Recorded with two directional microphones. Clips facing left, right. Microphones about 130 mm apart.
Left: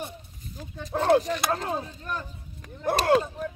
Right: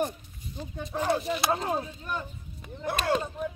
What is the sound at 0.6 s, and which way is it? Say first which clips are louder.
Speech: left 3 dB; centre (ahead or behind).